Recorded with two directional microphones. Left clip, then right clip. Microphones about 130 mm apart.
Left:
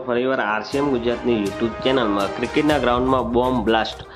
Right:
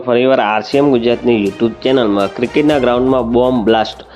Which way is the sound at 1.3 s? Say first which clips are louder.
Right 7 dB; 30° right (ahead or behind).